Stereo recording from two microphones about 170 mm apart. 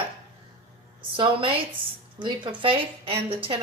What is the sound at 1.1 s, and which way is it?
A woman's voice, 30° right (ahead or behind).